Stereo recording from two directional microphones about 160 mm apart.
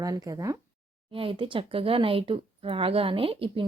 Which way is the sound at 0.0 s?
25° right (ahead or behind).